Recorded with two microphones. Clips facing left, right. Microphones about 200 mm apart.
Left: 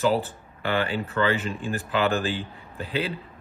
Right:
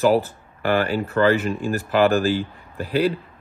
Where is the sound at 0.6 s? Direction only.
40° right (ahead or behind).